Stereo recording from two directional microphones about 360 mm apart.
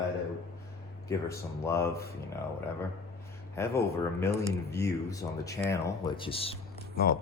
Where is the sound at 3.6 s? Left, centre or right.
Centre.